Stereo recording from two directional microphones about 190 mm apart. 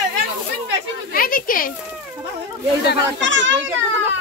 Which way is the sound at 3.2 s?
75° right (ahead or behind).